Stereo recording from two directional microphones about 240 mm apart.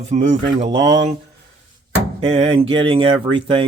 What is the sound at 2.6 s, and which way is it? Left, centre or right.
Speech, right.